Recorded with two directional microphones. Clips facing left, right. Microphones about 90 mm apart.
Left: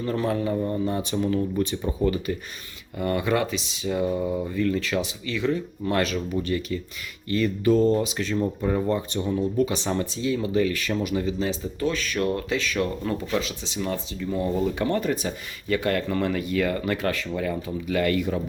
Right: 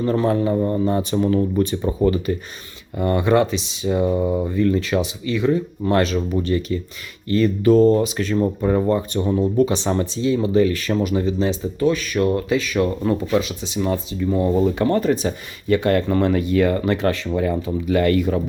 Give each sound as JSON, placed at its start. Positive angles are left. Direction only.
{"t": 0.0, "sound": "speech", "side_deg": -35}
{"t": 3.0, "sound": "speech", "side_deg": -30}
{"t": 5.5, "sound": "speech", "side_deg": -30}
{"t": 7.3, "sound": "speech", "side_deg": -40}
{"t": 11.9, "sound": "speech", "side_deg": -15}
{"t": 12.8, "sound": "speech", "side_deg": -25}
{"t": 14.3, "sound": "speech", "side_deg": -35}